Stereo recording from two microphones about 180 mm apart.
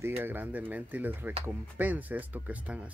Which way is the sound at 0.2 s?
10° right (ahead or behind).